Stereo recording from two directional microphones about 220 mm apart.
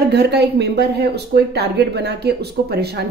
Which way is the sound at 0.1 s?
50° right (ahead or behind).